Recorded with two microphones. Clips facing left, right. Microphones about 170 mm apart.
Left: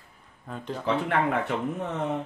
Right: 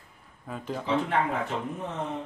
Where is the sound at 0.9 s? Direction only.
60° left (ahead or behind).